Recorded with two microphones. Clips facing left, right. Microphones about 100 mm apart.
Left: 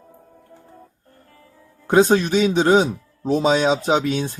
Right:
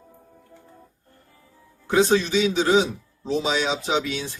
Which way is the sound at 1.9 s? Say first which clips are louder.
Left 4 dB; 45° left (ahead or behind).